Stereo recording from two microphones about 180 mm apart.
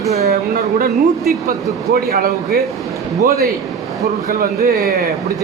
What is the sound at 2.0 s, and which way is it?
A woman's voice, 55° right (ahead or behind).